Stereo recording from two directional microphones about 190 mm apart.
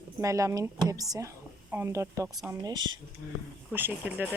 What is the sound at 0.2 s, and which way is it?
Speech, 15° right (ahead or behind).